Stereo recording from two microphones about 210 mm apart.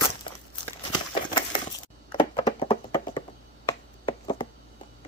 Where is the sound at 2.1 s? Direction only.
25° left (ahead or behind).